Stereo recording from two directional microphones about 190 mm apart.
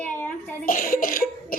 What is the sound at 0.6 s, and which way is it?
Cough, 45° left (ahead or behind).